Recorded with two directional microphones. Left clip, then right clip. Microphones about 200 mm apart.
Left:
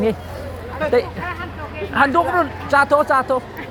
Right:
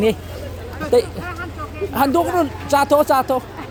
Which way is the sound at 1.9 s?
50° right (ahead or behind).